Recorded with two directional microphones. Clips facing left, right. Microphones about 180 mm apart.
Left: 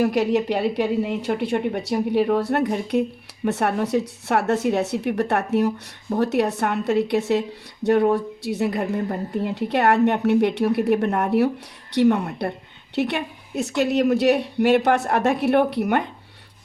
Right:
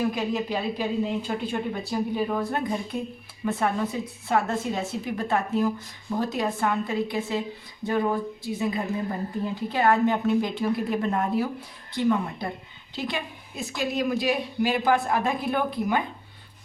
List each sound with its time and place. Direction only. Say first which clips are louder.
0.0 s a woman's voice: left 7 dB; 75° left (ahead or behind)